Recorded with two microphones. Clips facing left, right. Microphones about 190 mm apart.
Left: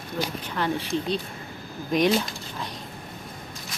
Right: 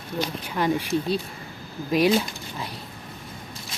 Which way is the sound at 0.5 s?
10° right (ahead or behind).